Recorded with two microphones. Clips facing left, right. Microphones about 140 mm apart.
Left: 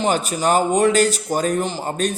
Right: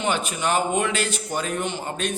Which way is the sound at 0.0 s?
35° left (ahead or behind).